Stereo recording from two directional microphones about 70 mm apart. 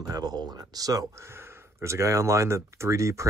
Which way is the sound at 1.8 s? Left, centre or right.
Right.